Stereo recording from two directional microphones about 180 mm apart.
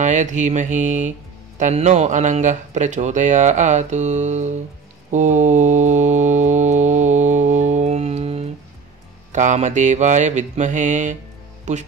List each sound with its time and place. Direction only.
0.0 s mantra: 45° right (ahead or behind)
1.6 s speech: 40° right (ahead or behind)
5.1 s mantra: 40° right (ahead or behind)
9.3 s speech: 40° right (ahead or behind)